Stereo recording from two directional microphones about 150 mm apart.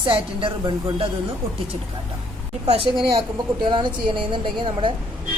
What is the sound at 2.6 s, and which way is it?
A woman's voice, 35° right (ahead or behind).